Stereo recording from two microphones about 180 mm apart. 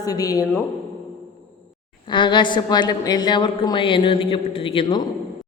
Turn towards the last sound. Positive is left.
turn(degrees=30)  # may be behind; listen again after turning